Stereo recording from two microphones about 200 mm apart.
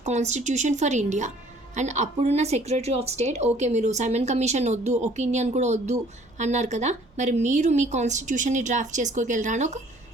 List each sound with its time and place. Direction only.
0.0 s a woman's voice: 35° right (ahead or behind)